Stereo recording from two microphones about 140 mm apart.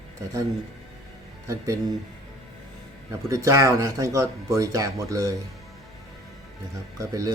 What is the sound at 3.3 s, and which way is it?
Speech, 20° right (ahead or behind).